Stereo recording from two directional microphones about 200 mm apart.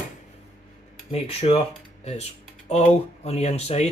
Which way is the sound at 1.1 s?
30° left (ahead or behind).